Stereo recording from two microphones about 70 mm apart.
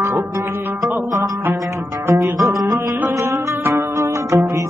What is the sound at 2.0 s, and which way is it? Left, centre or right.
Music, right.